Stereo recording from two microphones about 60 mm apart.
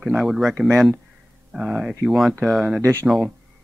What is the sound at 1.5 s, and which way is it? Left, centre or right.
Speech, centre.